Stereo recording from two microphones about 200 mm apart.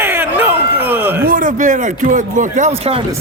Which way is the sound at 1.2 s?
45° right (ahead or behind).